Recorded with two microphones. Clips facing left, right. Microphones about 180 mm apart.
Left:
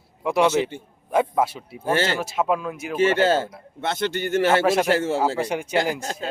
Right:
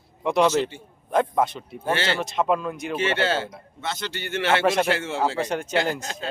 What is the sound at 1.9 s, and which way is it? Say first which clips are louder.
Speech: left 2 dB; 45° left (ahead or behind).